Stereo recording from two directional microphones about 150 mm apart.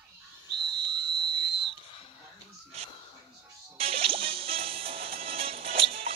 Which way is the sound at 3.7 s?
40° right (ahead or behind).